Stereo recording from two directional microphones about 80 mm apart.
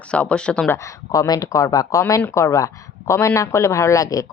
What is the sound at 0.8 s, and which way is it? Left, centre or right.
Speech, left.